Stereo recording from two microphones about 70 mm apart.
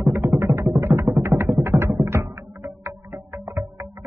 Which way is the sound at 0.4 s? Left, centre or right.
Right.